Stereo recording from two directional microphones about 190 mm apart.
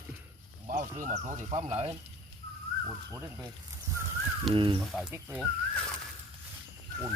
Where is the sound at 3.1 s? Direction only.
15° right (ahead or behind).